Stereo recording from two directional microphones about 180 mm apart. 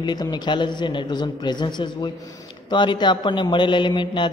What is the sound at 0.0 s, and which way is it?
A man's voice, 25° left (ahead or behind).